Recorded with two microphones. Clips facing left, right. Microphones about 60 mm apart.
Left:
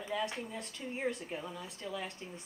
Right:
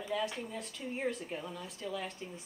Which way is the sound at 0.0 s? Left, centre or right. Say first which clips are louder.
Right 1 dB; centre.